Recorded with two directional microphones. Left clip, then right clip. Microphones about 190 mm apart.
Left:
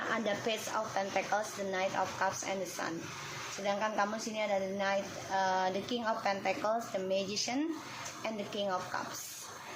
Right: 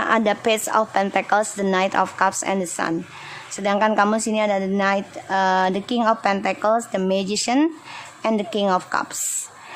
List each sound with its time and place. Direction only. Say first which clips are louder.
0.1 s a woman's voice: right 15 dB; 45° right (ahead or behind)